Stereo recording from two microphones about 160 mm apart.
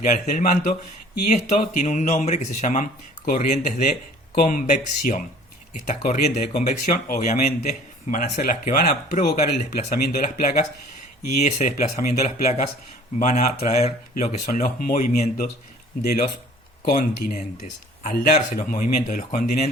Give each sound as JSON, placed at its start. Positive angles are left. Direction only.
{"t": 0.0, "sound": "speech", "side_deg": 50}
{"t": 7.7, "sound": "speech", "side_deg": 50}
{"t": 10.2, "sound": "speech", "side_deg": 50}
{"t": 16.8, "sound": "speech", "side_deg": 55}